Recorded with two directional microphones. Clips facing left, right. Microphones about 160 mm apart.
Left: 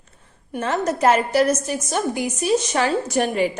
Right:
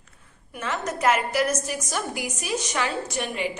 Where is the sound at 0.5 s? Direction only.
35° left (ahead or behind).